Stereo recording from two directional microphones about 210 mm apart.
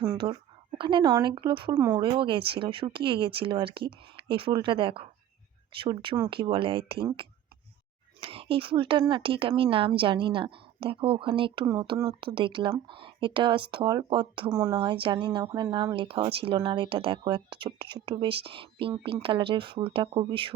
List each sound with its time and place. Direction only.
0.2 s speech: 20° right (ahead or behind)
1.7 s speech: 10° right (ahead or behind)
2.0 s speech: 25° right (ahead or behind)
8.2 s speech: 25° right (ahead or behind)